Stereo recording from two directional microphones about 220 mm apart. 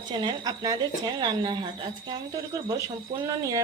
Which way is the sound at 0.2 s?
20° right (ahead or behind).